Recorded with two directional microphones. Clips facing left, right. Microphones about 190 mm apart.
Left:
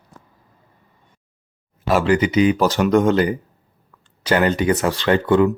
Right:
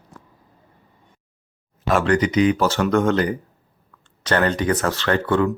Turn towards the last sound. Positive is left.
turn(degrees=15)  # may be behind; listen again after turning